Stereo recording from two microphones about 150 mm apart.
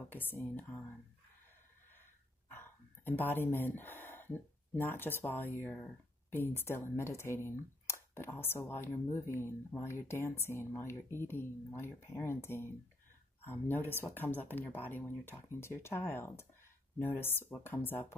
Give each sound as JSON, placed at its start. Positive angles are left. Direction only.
{"t": 0.1, "sound": "speech", "side_deg": 15}
{"t": 2.5, "sound": "speech", "side_deg": 15}